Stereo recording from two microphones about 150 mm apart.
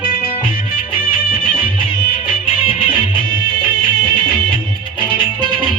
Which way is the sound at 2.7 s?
35° left (ahead or behind).